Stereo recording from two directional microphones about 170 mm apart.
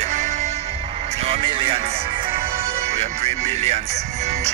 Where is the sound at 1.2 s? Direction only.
35° right (ahead or behind).